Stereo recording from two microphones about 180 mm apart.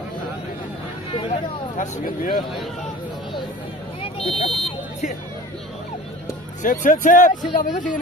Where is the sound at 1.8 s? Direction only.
50° left (ahead or behind).